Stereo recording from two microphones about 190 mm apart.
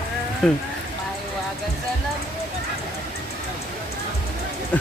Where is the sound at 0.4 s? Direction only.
5° left (ahead or behind).